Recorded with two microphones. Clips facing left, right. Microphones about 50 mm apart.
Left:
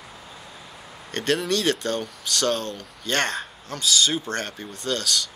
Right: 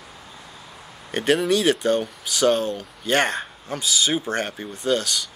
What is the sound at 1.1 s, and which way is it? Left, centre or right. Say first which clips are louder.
Speech: right 4 dB; centre.